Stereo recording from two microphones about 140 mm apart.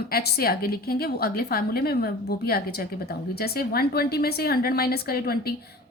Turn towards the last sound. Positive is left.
turn(degrees=90)